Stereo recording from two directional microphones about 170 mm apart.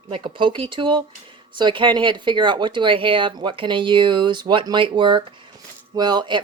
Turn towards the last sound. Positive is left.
turn(degrees=-25)  # may be behind; listen again after turning